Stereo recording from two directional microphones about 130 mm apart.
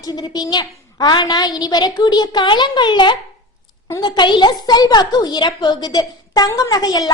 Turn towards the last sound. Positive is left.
turn(degrees=30)  # may be behind; listen again after turning